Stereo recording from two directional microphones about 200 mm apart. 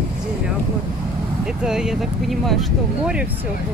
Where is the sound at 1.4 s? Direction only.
5° right (ahead or behind).